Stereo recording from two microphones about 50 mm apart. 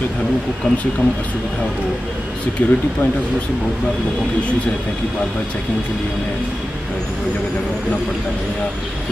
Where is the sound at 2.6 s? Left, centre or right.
Left.